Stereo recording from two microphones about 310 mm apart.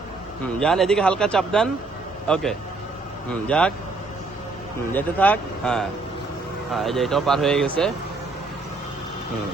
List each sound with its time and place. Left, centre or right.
0.4 s a man's voice: centre
4.9 s a man's voice: centre